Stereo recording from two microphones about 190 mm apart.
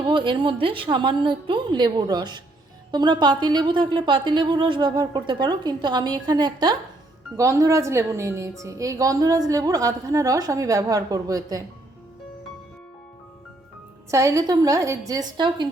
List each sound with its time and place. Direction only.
0.0 s a woman's voice: 25° right (ahead or behind)
14.1 s a woman's voice: 15° right (ahead or behind)